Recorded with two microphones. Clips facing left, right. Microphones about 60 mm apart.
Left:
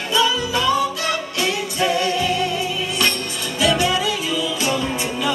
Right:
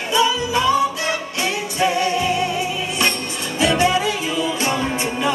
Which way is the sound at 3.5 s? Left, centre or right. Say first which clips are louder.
Right 2 dB; right.